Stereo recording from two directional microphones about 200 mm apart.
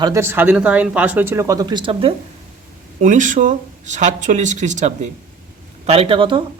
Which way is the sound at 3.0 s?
40° right (ahead or behind).